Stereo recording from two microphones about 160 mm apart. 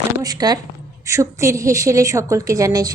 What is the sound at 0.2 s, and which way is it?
A woman's voice, 25° right (ahead or behind).